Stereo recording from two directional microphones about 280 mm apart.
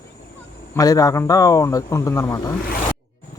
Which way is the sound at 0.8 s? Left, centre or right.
Centre.